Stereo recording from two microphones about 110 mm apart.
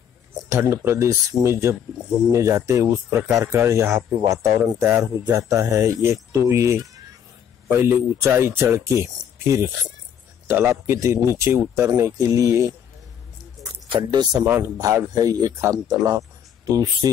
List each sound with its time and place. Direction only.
0.5 s speech: 25° right (ahead or behind)
10.5 s speech: 25° right (ahead or behind)
13.9 s speech: 40° right (ahead or behind)
14.4 s speech: 20° right (ahead or behind)
14.8 s speech: 35° right (ahead or behind)